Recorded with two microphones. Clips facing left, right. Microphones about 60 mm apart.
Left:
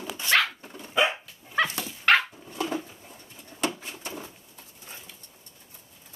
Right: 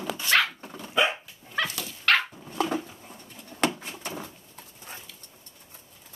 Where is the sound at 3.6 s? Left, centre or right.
Right.